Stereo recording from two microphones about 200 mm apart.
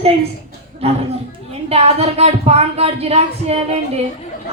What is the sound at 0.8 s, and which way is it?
Speech, 30° right (ahead or behind).